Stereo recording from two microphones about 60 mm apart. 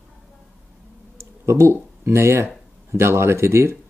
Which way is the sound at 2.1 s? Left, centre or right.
Right.